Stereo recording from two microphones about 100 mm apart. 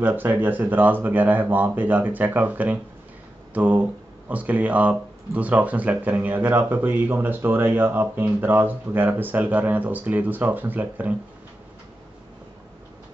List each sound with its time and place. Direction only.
0.0 s speech: 20° right (ahead or behind)